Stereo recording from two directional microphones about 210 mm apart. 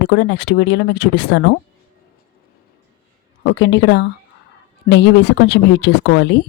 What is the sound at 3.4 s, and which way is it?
Speech, 55° left (ahead or behind).